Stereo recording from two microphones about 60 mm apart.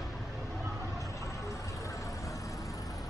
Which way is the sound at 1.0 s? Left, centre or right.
Left.